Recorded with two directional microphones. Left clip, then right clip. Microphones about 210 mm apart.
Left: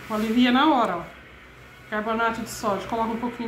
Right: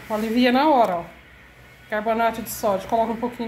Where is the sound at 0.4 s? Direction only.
20° right (ahead or behind).